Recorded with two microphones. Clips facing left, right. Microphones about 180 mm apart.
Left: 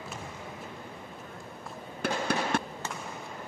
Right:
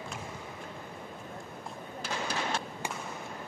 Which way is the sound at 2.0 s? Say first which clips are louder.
Left 5 dB; 60° left (ahead or behind).